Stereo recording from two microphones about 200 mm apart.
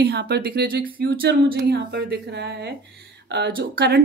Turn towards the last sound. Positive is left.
turn(degrees=-55)  # may be behind; listen again after turning